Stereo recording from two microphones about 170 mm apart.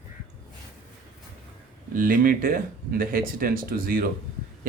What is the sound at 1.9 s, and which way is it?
Speech, 55° right (ahead or behind).